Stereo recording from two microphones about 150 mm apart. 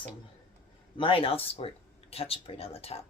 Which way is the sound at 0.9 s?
35° left (ahead or behind).